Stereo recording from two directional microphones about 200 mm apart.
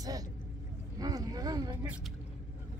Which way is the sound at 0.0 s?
20° right (ahead or behind).